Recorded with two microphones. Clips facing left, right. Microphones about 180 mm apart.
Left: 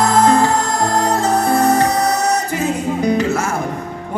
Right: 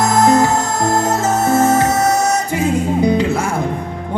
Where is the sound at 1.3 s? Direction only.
25° right (ahead or behind).